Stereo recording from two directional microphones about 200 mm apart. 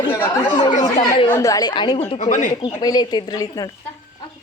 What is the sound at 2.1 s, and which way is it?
Speech, 35° left (ahead or behind).